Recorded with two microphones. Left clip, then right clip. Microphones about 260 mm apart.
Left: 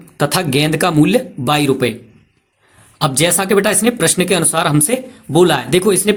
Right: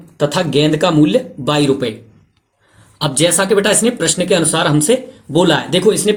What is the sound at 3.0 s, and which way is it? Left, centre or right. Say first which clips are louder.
Speech: right 1 dB; left.